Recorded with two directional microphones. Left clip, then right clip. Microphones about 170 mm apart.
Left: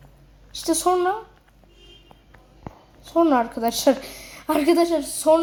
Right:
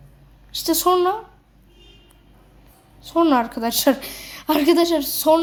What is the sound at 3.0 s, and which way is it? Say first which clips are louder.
A woman's voice: right 1 dB; centre (ahead or behind).